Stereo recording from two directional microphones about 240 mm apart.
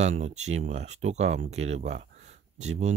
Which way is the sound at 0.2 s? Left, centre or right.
Right.